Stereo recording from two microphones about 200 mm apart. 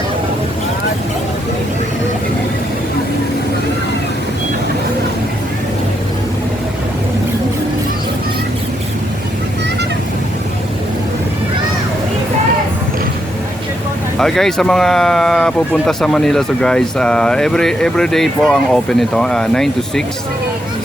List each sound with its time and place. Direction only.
14.2 s speech: centre (ahead or behind)